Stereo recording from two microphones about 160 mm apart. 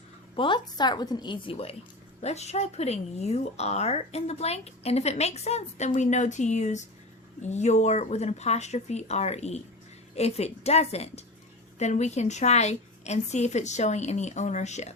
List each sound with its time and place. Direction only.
0.3 s a woman's voice: 30° left (ahead or behind); by 14.9 s 45° left (ahead or behind)